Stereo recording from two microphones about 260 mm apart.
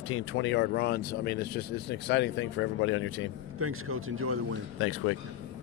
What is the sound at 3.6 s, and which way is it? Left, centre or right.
Speech, right.